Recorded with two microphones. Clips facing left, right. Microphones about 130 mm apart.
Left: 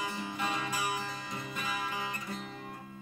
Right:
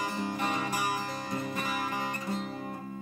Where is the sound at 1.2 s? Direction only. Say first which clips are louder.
Right 5 dB; 45° right (ahead or behind).